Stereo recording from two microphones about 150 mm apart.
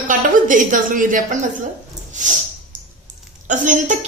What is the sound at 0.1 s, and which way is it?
A woman's voice, 60° right (ahead or behind).